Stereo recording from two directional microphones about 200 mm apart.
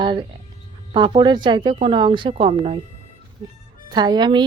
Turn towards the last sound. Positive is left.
turn(degrees=-20)  # may be behind; listen again after turning